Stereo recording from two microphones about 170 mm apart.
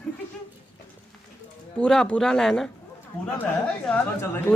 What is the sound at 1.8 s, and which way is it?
A woman's voice, 5° left (ahead or behind).